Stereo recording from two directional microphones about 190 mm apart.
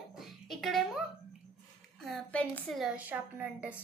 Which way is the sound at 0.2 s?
Centre (ahead or behind).